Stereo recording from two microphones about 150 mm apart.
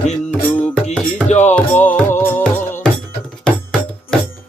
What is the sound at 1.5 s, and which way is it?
Music, 10° left (ahead or behind).